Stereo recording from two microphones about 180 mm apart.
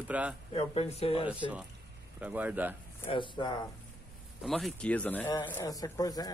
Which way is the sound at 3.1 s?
25° left (ahead or behind).